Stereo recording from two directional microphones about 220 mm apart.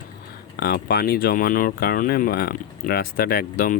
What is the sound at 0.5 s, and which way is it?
Speech, 45° left (ahead or behind).